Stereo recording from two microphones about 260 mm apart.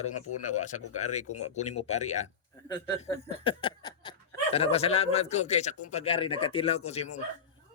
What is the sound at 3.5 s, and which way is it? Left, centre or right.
Speech, centre.